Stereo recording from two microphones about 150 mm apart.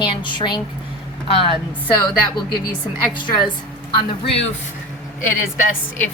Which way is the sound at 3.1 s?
30° left (ahead or behind).